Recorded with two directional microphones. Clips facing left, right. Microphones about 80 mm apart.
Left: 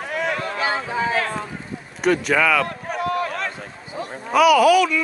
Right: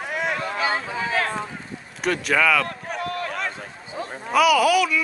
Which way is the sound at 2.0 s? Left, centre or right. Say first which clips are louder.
Left 3 dB; centre.